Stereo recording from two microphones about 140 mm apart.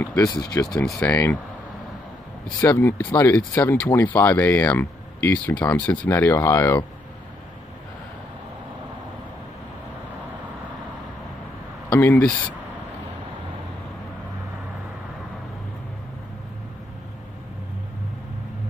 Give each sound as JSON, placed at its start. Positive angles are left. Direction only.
{"t": 0.0, "sound": "speech", "side_deg": 20}
{"t": 2.6, "sound": "speech", "side_deg": 15}
{"t": 11.9, "sound": "speech", "side_deg": 15}